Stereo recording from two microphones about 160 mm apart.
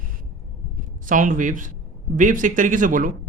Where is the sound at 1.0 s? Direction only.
55° right (ahead or behind).